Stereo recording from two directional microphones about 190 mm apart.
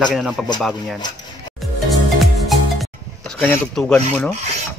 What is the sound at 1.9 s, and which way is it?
Music, centre (ahead or behind).